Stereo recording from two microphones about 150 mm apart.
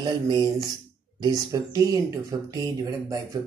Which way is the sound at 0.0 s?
30° right (ahead or behind).